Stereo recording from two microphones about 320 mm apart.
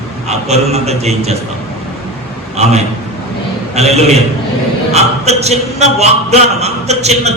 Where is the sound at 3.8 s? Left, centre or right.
Centre.